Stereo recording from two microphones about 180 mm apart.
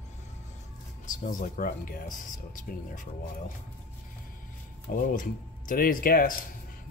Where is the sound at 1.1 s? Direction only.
45° left (ahead or behind).